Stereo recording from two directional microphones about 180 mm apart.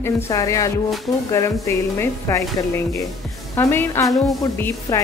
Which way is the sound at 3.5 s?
10° left (ahead or behind).